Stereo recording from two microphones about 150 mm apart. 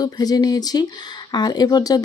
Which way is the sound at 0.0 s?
25° left (ahead or behind).